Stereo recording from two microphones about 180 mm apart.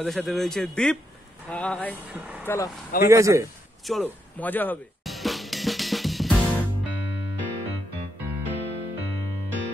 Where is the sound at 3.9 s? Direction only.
5° left (ahead or behind).